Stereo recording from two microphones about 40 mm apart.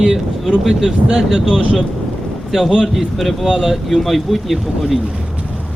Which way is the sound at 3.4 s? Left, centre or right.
Centre.